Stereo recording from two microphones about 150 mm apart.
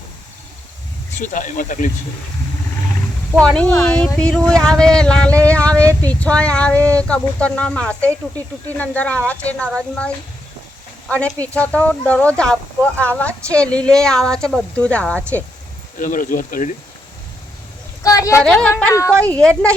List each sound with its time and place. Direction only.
1.2 s speech: 60° left (ahead or behind)
3.4 s speech: 5° left (ahead or behind)
11.1 s speech: 10° left (ahead or behind)
16.0 s speech: 65° left (ahead or behind)
18.0 s speech: 20° left (ahead or behind)
18.4 s speech: 5° left (ahead or behind)